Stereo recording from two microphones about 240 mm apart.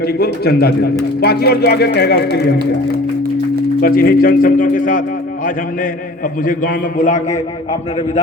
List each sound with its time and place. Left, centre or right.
0.0 s speech: left
3.8 s speech: left
6.4 s a man's voice: left